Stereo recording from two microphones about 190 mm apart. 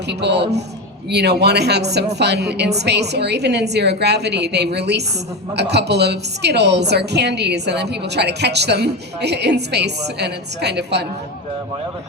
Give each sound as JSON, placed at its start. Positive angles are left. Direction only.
{"t": 0.1, "sound": "a woman's voice", "side_deg": -65}